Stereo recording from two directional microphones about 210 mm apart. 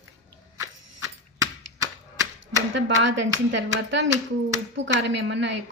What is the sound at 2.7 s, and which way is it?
Speech, 60° right (ahead or behind).